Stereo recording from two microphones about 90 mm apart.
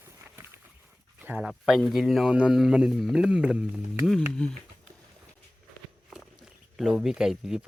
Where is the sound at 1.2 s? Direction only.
20° right (ahead or behind).